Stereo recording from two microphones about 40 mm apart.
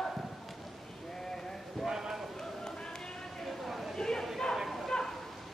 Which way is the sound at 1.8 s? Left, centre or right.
Centre.